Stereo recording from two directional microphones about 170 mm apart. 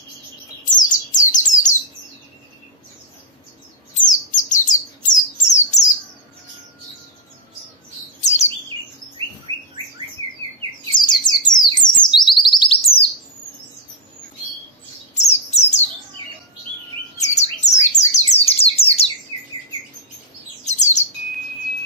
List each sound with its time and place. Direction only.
0.8 s bird: 45° left (ahead or behind)
4.0 s bird: 50° left (ahead or behind)
8.2 s chirp: 40° left (ahead or behind)
10.9 s bird: 25° left (ahead or behind)
15.1 s chirp: 40° left (ahead or behind)
17.2 s bird: 40° left (ahead or behind)
20.6 s bird: 45° left (ahead or behind)